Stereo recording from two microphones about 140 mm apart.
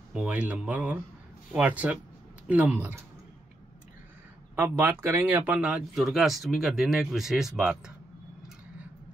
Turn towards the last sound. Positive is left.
turn(degrees=-5)  # may be behind; listen again after turning